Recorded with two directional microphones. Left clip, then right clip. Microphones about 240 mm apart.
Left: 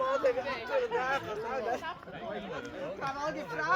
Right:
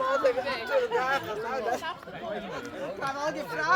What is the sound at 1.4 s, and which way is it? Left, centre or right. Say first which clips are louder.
Chatter: right 3 dB; right.